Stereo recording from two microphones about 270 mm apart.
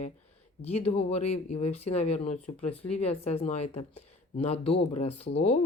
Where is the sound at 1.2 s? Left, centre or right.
Left.